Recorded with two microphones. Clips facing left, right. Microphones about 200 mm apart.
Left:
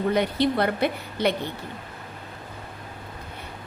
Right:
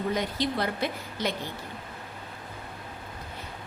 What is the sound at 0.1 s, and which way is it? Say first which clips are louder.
A woman's voice: left 8 dB; 60° left (ahead or behind).